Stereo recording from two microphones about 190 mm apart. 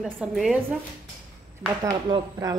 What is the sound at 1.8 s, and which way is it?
Speech, 20° right (ahead or behind).